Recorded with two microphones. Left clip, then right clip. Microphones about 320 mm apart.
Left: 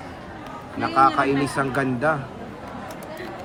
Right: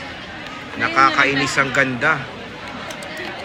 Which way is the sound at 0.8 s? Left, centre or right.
Centre.